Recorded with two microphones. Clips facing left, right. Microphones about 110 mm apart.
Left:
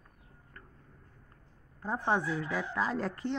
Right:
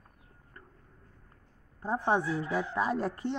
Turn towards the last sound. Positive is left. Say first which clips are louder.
# right 2 dB
turn(degrees=-25)  # may be behind; listen again after turning